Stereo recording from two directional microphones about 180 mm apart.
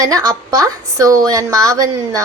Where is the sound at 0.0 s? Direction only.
20° right (ahead or behind).